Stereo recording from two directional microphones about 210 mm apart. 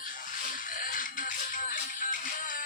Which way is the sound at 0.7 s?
40° left (ahead or behind).